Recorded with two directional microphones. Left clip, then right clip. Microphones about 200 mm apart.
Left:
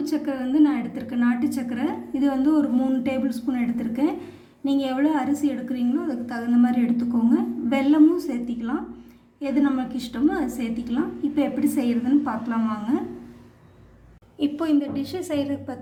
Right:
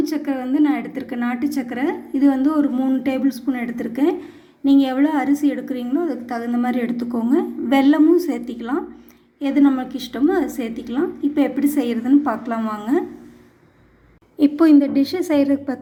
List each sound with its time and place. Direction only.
0.0 s a woman's voice: 25° right (ahead or behind)
14.3 s a woman's voice: 30° right (ahead or behind)